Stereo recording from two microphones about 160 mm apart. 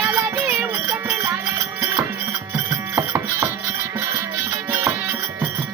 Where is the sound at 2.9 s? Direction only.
15° right (ahead or behind).